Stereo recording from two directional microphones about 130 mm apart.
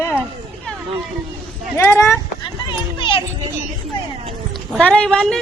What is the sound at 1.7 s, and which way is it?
Speech, 20° left (ahead or behind).